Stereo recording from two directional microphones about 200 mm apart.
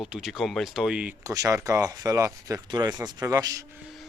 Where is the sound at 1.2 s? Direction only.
15° right (ahead or behind).